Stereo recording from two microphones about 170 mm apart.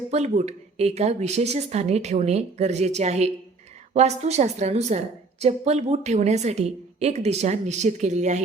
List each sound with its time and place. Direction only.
0.1 s a woman's voice: 40° right (ahead or behind)